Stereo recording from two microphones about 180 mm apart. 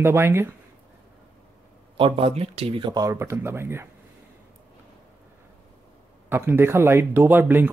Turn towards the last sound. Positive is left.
turn(degrees=-10)  # may be behind; listen again after turning